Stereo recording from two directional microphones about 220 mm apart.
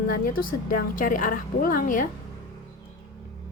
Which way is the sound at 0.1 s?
40° left (ahead or behind).